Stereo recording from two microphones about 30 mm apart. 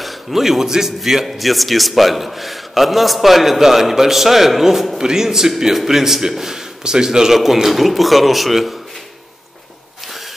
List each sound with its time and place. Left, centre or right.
0.0 s a man's voice: centre